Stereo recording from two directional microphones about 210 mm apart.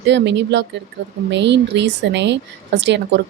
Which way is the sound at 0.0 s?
55° right (ahead or behind).